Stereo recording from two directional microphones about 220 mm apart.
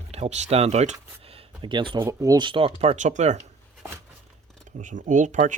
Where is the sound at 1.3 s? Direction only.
20° right (ahead or behind).